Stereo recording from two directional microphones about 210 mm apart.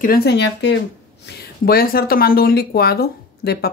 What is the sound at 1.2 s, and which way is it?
Speech, 45° left (ahead or behind).